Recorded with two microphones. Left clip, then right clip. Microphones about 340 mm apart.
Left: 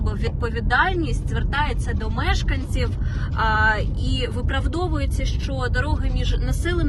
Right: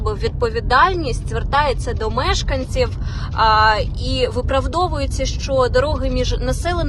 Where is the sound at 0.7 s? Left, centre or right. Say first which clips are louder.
Right 5 dB; centre.